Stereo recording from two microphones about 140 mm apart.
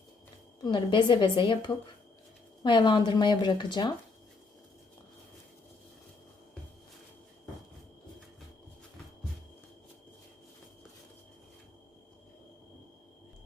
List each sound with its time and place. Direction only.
0.6 s speech: 30° left (ahead or behind)